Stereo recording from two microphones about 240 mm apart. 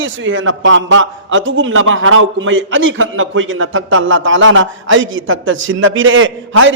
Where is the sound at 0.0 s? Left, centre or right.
Right.